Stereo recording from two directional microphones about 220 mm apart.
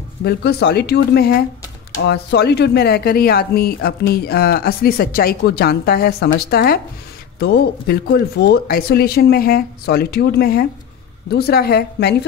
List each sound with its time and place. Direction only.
0.2 s speech: 50° left (ahead or behind)